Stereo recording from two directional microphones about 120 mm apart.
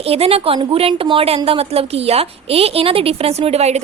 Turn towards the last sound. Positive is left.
turn(degrees=-65)  # may be behind; listen again after turning